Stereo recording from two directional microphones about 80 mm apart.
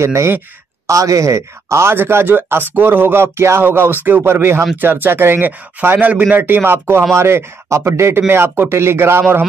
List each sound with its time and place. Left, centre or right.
0.0 s speech: right